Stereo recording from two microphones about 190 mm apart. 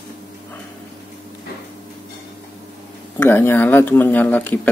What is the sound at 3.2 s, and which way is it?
Speech, 10° left (ahead or behind).